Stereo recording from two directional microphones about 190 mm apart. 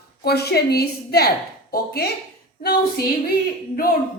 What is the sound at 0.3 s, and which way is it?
A woman's voice, 60° left (ahead or behind).